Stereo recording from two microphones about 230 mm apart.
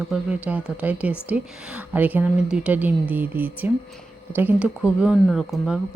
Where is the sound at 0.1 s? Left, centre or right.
Centre.